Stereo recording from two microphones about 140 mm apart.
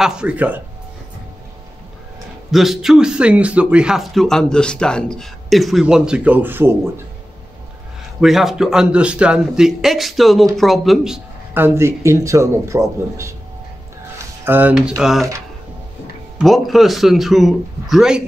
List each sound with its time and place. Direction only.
0.0 s speech: 5° right (ahead or behind)
2.5 s a man's voice: centre (ahead or behind)
8.2 s a man's voice: centre (ahead or behind)
11.5 s a man's voice: 15° right (ahead or behind)
14.1 s a sound: 15° right (ahead or behind)
14.8 s a man's voice: centre (ahead or behind)
16.3 s a man's voice: centre (ahead or behind)